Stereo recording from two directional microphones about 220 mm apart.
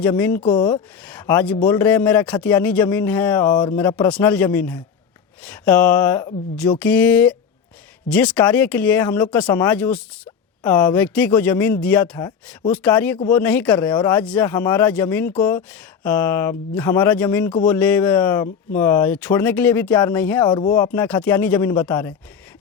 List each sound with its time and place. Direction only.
0.2 s speech: 10° left (ahead or behind)
0.4 s speech: 20° left (ahead or behind)
1.0 s speech: 10° left (ahead or behind)
3.5 s speech: 20° left (ahead or behind)
3.8 s speech: 10° left (ahead or behind)
20.4 s speech: 20° left (ahead or behind)